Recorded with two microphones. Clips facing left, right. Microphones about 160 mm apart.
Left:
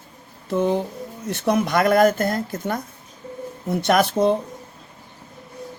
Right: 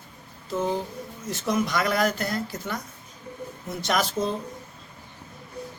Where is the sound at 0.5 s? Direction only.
65° left (ahead or behind).